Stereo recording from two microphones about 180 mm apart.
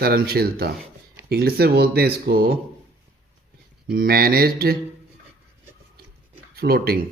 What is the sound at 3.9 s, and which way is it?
Speech, 55° right (ahead or behind).